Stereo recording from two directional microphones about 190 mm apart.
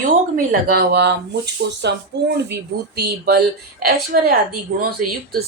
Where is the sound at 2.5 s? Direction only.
60° right (ahead or behind).